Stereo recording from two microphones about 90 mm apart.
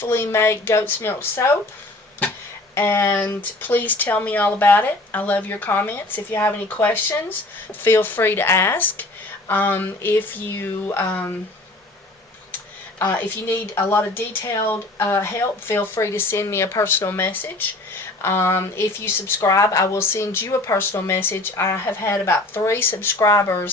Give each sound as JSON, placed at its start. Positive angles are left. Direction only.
{"t": 0.0, "sound": "speech", "side_deg": 25}
{"t": 2.7, "sound": "speech", "side_deg": 25}
{"t": 13.0, "sound": "speech", "side_deg": 25}